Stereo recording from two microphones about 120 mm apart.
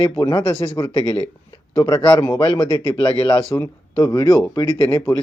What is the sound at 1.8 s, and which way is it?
Speech, 30° left (ahead or behind).